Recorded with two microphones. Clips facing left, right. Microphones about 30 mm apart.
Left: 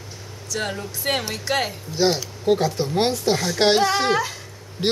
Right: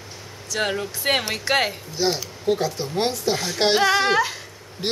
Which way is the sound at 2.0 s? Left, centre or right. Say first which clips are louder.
Left 3 dB; centre.